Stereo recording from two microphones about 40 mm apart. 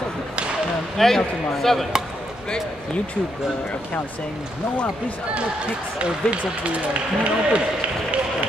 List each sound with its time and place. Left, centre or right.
0.9 s speech: centre
5.9 s speech: right